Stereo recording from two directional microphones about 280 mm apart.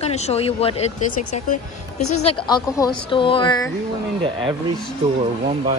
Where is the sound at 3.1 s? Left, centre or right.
Centre.